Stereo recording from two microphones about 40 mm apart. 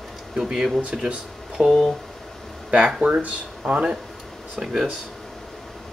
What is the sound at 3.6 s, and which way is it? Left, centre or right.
Speech, right.